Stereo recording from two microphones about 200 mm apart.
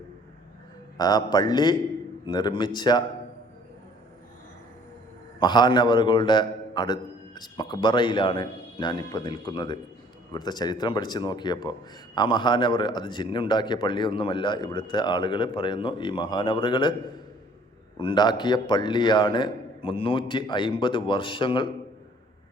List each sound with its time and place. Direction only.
0.9 s a man's voice: 20° left (ahead or behind)
5.4 s a man's voice: 20° left (ahead or behind)
17.9 s a man's voice: 25° left (ahead or behind)